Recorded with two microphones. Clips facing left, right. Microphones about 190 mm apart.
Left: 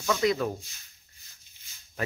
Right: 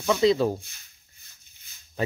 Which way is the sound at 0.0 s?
20° right (ahead or behind).